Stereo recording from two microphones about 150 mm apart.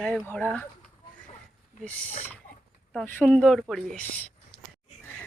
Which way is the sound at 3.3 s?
5° left (ahead or behind).